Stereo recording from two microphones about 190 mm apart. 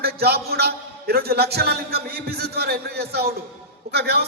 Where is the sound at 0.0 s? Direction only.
55° right (ahead or behind).